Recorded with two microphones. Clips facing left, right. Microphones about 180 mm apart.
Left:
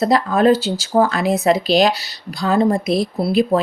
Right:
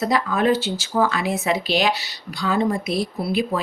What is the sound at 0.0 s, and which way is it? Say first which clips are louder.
Speech: left 5 dB; 35° left (ahead or behind).